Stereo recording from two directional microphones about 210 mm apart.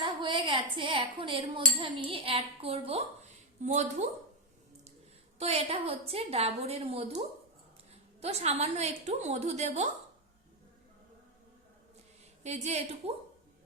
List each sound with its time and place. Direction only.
0.0 s a woman's voice: 25° right (ahead or behind)
5.4 s a woman's voice: 30° right (ahead or behind)
12.4 s a woman's voice: 30° right (ahead or behind)